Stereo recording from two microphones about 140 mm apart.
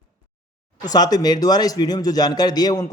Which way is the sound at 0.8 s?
30° left (ahead or behind).